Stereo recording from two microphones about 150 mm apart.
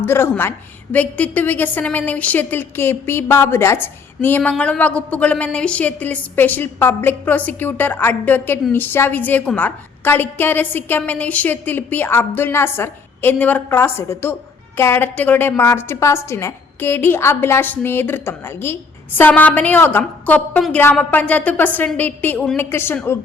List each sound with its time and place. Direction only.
0.0 s a woman's voice: 15° left (ahead or behind)